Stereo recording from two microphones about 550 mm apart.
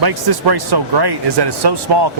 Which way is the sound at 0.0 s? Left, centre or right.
Right.